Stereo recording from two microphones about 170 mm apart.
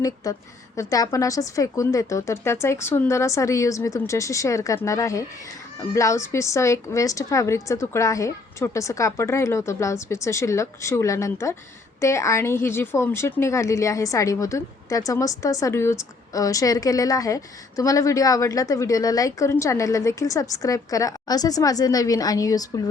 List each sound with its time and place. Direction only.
0.2 s a woman's voice: 20° left (ahead or behind)